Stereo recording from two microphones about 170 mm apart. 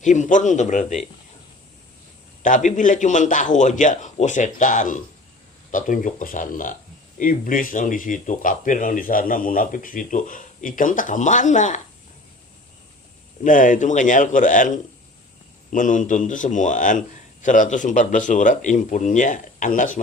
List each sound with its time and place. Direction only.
0.0 s speech: 45° left (ahead or behind)
2.4 s speech: 50° left (ahead or behind)
13.4 s speech: 50° left (ahead or behind)
15.7 s speech: 50° left (ahead or behind)